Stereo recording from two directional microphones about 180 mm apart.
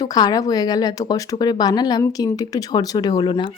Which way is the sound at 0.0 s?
20° left (ahead or behind).